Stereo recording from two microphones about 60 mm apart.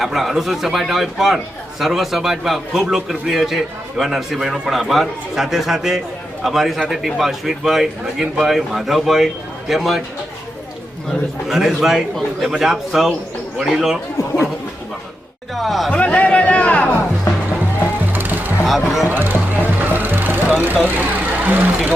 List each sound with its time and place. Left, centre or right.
0.0 s a man's voice: centre
11.4 s a man's voice: centre
15.5 s a man's voice: centre
15.9 s a sound: left
17.3 s music: left
18.1 s music: right
18.6 s speech: centre
19.0 s music: right
20.8 s a sound: right